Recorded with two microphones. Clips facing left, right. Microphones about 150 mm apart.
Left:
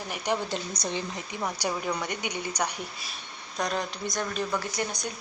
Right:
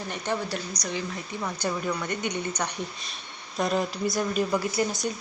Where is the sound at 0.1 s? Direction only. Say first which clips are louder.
Left 1 dB; 20° left (ahead or behind).